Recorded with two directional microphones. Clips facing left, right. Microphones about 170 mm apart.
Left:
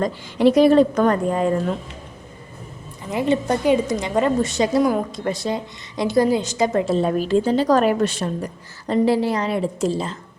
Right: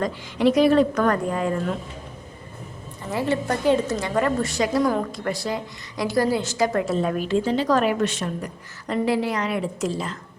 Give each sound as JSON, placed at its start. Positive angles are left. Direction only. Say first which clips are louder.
{"t": 0.0, "sound": "a woman's voice", "louder": "left 4 dB", "side_deg": 30}
{"t": 3.1, "sound": "a woman's voice", "louder": "left 4 dB", "side_deg": 15}